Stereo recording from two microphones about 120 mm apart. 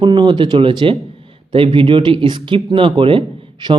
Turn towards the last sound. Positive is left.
turn(degrees=-45)  # may be behind; listen again after turning